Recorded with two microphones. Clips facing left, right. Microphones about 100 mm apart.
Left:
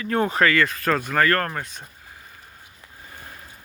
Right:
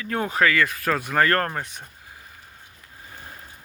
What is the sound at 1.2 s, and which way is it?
Speech, 30° right (ahead or behind).